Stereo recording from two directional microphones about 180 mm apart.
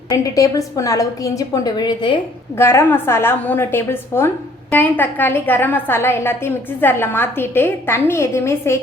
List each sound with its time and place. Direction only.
0.3 s a woman's voice: 20° left (ahead or behind)
2.6 s a woman's voice: 15° left (ahead or behind)